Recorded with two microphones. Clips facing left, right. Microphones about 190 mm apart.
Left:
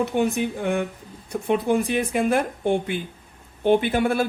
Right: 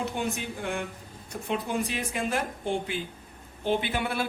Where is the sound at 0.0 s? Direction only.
55° left (ahead or behind).